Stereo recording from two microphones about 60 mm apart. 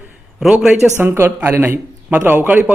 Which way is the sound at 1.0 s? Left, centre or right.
Right.